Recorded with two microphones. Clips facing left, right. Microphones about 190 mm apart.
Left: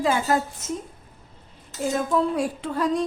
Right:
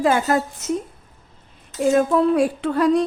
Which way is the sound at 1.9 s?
65° right (ahead or behind).